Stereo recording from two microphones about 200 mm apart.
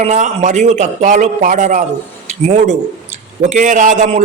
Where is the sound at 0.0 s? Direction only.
35° right (ahead or behind).